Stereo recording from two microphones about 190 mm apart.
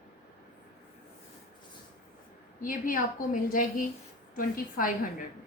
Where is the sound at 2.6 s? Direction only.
45° left (ahead or behind).